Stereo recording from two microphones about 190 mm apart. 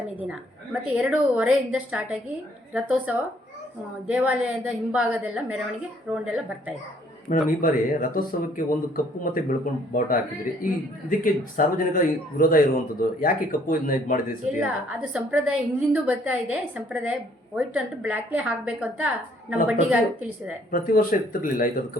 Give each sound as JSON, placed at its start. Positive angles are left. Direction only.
{"t": 0.3, "sound": "a woman's voice", "side_deg": -5}
{"t": 7.3, "sound": "speech", "side_deg": 45}
{"t": 11.2, "sound": "speech", "side_deg": 45}
{"t": 14.6, "sound": "a woman's voice", "side_deg": -5}
{"t": 20.7, "sound": "speech", "side_deg": 50}